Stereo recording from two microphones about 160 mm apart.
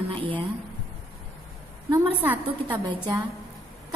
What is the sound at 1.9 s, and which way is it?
A woman's voice, 15° right (ahead or behind).